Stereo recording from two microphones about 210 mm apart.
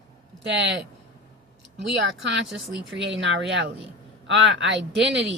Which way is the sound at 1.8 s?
55° right (ahead or behind).